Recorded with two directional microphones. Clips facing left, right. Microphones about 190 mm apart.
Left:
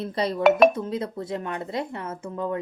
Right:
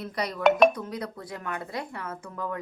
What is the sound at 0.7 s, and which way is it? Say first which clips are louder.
Speech: left 5 dB; 25° left (ahead or behind).